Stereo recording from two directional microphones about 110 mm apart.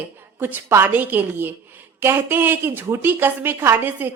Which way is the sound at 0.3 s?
20° right (ahead or behind).